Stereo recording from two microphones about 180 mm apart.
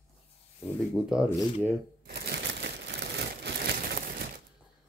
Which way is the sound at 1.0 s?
5° left (ahead or behind).